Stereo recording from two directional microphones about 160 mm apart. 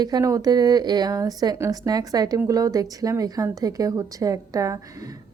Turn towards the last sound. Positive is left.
turn(degrees=-20)  # may be behind; listen again after turning